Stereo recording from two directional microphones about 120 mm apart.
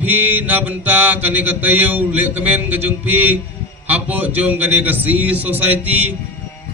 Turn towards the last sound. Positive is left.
turn(degrees=-15)  # may be behind; listen again after turning